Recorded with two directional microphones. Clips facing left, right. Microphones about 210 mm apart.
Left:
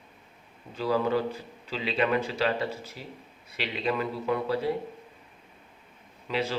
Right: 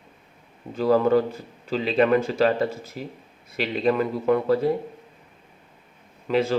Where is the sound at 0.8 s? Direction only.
45° right (ahead or behind).